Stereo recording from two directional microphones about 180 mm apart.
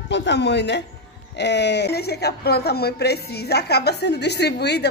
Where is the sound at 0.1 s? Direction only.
75° left (ahead or behind).